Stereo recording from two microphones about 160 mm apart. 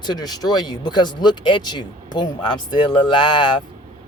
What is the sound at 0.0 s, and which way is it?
Speech, 25° left (ahead or behind).